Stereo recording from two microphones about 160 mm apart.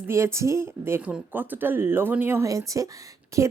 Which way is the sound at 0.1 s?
15° right (ahead or behind).